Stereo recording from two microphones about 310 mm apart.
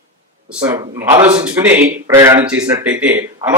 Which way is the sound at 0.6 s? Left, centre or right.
Centre.